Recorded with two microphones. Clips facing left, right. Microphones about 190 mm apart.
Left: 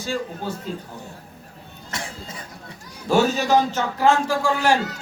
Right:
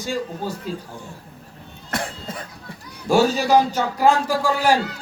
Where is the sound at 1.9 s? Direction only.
55° right (ahead or behind).